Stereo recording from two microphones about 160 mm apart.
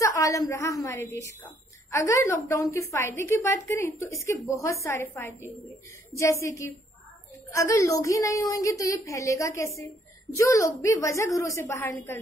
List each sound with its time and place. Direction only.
0.0 s a woman's voice: 20° left (ahead or behind)
1.9 s a woman's voice: 20° left (ahead or behind)
7.5 s a woman's voice: 20° left (ahead or behind)